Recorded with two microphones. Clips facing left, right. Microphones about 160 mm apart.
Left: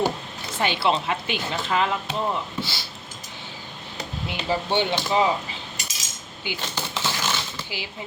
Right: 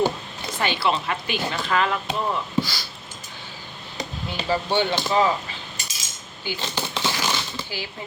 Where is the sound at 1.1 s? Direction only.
20° left (ahead or behind).